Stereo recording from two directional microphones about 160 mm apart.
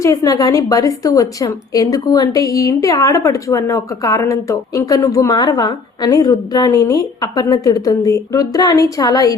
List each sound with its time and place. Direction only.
0.0 s a woman's voice: 20° left (ahead or behind)